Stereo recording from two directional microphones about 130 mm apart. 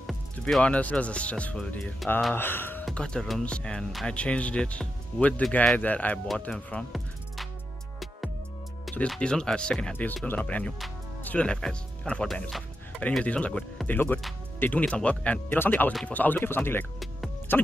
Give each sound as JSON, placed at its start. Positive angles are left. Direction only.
{"t": 0.0, "sound": "speech", "side_deg": 5}
{"t": 2.3, "sound": "speech", "side_deg": 15}
{"t": 8.9, "sound": "speech", "side_deg": 5}